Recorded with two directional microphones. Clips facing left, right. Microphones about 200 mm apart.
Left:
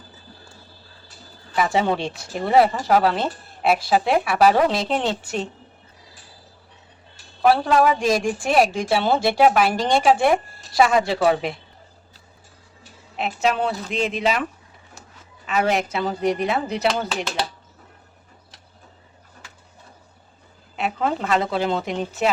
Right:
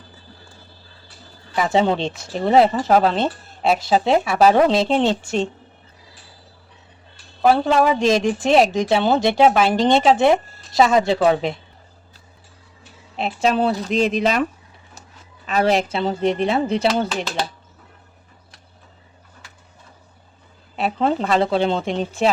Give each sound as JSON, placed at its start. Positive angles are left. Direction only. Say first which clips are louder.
{"t": 1.5, "sound": "speech", "louder": "right 3 dB", "side_deg": -25}
{"t": 7.4, "sound": "speech", "louder": "right 1 dB", "side_deg": -25}
{"t": 13.1, "sound": "speech", "louder": "right 3 dB", "side_deg": -35}
{"t": 15.4, "sound": "speech", "louder": "right 3 dB", "side_deg": -35}
{"t": 20.7, "sound": "speech", "louder": "right 4 dB", "side_deg": -30}